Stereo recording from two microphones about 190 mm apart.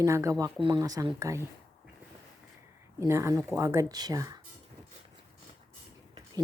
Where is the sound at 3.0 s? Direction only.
15° right (ahead or behind).